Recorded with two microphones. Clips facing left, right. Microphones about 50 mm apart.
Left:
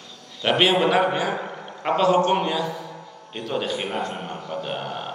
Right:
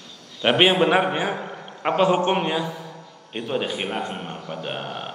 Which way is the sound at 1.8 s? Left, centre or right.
Right.